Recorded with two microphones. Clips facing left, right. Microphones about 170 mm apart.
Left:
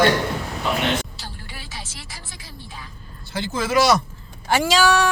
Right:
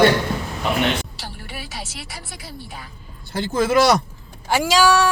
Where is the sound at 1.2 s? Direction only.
65° right (ahead or behind).